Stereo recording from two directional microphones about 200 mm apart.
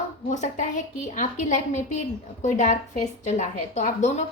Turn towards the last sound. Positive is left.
turn(degrees=35)  # may be behind; listen again after turning